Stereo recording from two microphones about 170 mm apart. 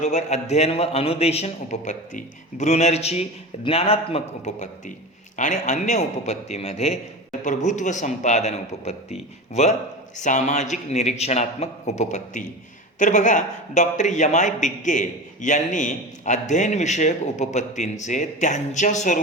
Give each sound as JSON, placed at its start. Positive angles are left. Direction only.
{"t": 0.0, "sound": "a man's voice", "side_deg": 40}